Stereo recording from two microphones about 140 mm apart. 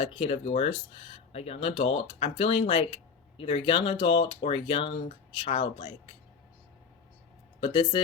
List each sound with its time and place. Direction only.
0.0 s speech: 45° left (ahead or behind)
7.6 s speech: 40° left (ahead or behind)